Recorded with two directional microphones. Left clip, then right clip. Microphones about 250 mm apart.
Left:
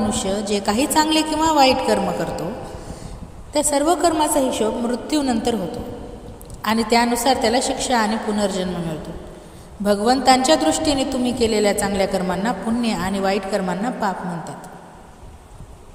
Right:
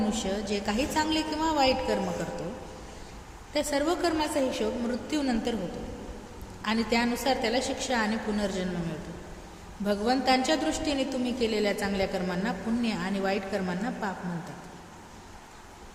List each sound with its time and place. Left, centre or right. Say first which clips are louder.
0.1 s a woman's voice: left 9 dB; left
3.5 s a woman's voice: left 9 dB; left
6.6 s a woman's voice: left 10 dB; left
9.8 s a woman's voice: left 10 dB; left